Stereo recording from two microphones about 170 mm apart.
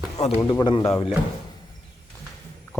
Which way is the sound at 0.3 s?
15° left (ahead or behind).